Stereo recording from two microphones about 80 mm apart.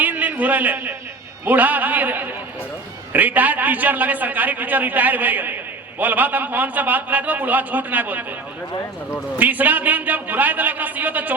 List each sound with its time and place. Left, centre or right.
0.0 s a sound: right
1.5 s a man's voice: right
9.4 s a man's voice: right